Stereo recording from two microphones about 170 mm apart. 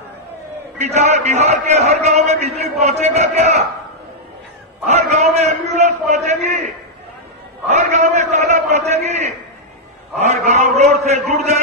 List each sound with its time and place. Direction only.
0.7 s a man's voice: 40° right (ahead or behind)
4.8 s a man's voice: 40° right (ahead or behind)